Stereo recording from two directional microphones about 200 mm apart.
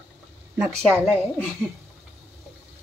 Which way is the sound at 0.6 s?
5° right (ahead or behind).